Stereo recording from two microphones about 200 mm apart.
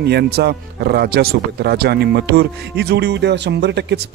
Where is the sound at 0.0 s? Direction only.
55° right (ahead or behind).